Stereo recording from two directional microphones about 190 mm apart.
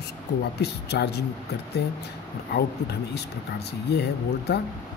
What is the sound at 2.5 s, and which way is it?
Speech, 60° left (ahead or behind).